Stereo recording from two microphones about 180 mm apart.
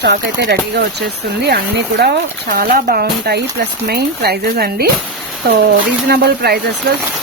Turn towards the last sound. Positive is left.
turn(degrees=-60)  # may be behind; listen again after turning